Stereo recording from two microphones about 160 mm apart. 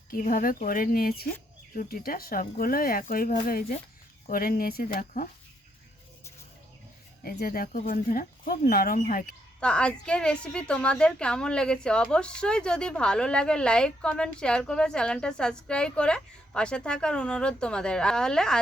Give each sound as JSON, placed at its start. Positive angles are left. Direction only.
{"t": 0.1, "sound": "speech", "side_deg": 60}
{"t": 7.3, "sound": "speech", "side_deg": 70}
{"t": 9.6, "sound": "a woman's voice", "side_deg": 5}